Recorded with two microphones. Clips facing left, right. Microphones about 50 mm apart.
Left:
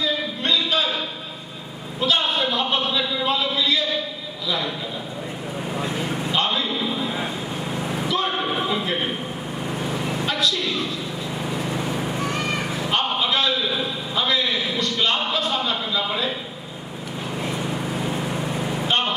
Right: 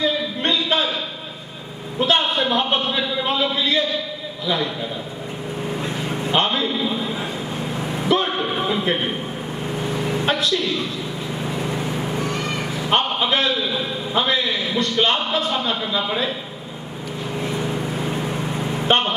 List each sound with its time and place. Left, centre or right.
0.0 s a sound: right
2.0 s a sound: right
5.7 s vehicle: centre
6.3 s a man's voice: right
7.6 s vehicle: centre
9.8 s vehicle: centre
11.4 s vehicle: centre
12.3 s a sound: centre
12.9 s a sound: right
17.6 s vehicle: centre
18.4 s vehicle: centre
18.9 s speech: right